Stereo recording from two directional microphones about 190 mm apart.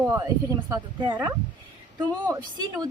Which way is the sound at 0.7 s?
20° right (ahead or behind).